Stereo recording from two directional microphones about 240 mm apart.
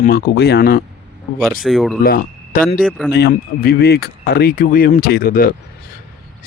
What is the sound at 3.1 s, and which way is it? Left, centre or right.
Speech, left.